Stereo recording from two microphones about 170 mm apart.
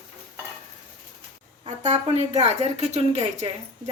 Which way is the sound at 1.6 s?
40° right (ahead or behind).